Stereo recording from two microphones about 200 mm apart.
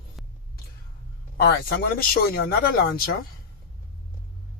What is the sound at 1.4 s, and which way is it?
Speech, 50° left (ahead or behind).